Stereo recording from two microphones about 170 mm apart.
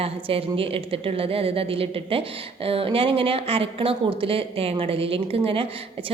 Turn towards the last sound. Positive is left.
turn(degrees=-35)  # may be behind; listen again after turning